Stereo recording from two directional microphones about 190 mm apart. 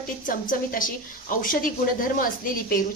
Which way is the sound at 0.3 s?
45° left (ahead or behind).